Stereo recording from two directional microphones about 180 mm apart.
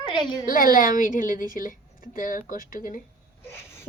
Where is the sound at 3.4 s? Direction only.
15° left (ahead or behind).